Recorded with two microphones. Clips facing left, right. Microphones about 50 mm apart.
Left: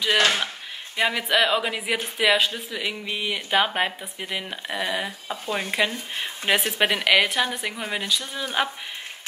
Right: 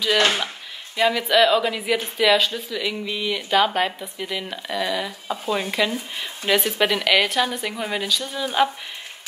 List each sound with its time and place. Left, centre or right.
0.9 s speech: centre
6.1 s speech: left
6.8 s speech: centre
7.7 s a woman's voice: centre